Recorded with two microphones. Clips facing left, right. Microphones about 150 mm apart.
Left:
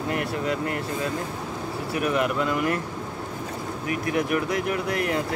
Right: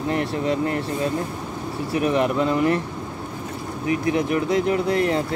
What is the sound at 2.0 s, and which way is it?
Speech, 25° right (ahead or behind).